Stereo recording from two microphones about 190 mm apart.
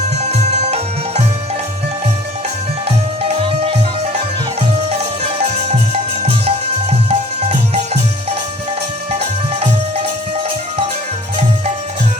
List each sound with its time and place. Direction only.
0.2 s music: 35° right (ahead or behind)
3.2 s music: 30° right (ahead or behind)
4.9 s music: 30° right (ahead or behind)
9.1 s music: 30° right (ahead or behind)